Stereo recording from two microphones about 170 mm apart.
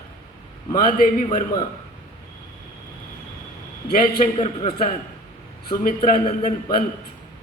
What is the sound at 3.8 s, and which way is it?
Speech, 65° left (ahead or behind).